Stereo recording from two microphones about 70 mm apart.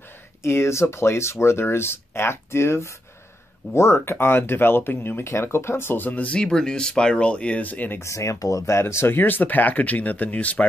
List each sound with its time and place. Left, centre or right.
0.4 s speech: left
8.0 s speech: left